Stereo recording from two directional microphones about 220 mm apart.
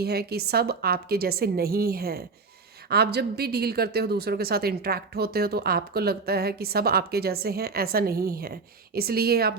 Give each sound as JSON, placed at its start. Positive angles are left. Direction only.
{"t": 0.0, "sound": "a woman's voice", "side_deg": -45}